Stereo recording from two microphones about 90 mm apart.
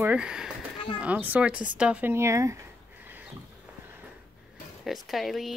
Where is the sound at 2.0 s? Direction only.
30° right (ahead or behind).